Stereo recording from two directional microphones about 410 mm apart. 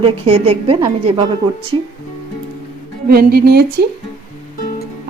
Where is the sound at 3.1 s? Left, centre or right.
Right.